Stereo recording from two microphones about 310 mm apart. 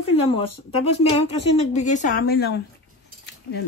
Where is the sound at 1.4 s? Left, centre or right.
Left.